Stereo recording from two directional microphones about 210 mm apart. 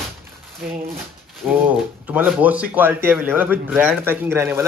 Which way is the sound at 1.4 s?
5° right (ahead or behind).